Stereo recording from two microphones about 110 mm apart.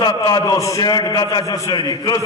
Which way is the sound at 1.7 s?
40° left (ahead or behind).